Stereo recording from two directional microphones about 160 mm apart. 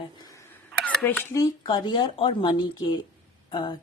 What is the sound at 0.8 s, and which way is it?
Speech, 10° left (ahead or behind).